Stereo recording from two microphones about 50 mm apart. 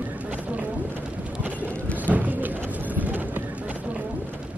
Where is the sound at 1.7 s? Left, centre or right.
Left.